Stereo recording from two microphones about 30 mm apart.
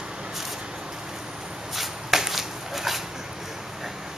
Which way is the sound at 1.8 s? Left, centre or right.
Centre.